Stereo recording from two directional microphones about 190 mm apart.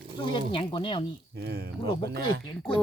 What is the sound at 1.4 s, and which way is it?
Speech, 55° right (ahead or behind).